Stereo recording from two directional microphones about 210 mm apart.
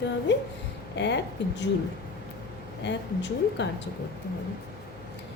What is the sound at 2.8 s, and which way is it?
Speech, 55° left (ahead or behind).